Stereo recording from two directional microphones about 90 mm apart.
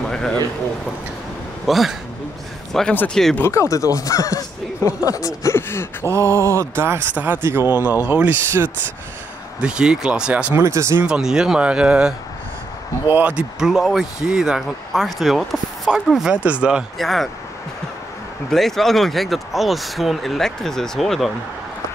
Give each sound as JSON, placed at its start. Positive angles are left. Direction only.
{"t": 0.1, "sound": "a sound", "side_deg": 5}
{"t": 1.7, "sound": "speech", "side_deg": 0}
{"t": 3.3, "sound": "speech", "side_deg": 30}
{"t": 6.0, "sound": "speech", "side_deg": -30}
{"t": 9.6, "sound": "speech", "side_deg": -10}
{"t": 10.5, "sound": "speech", "side_deg": -30}
{"t": 11.1, "sound": "speech", "side_deg": -5}
{"t": 17.0, "sound": "speech", "side_deg": 0}
{"t": 18.5, "sound": "speech", "side_deg": 5}